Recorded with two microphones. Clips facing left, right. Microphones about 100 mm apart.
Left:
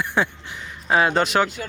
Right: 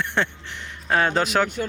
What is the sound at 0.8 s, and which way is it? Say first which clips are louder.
Speech: left 2 dB; 5° left (ahead or behind).